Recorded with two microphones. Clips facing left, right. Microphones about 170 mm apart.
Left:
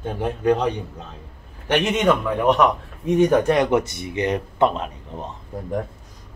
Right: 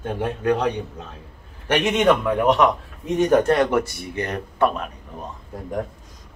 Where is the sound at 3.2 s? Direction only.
10° left (ahead or behind).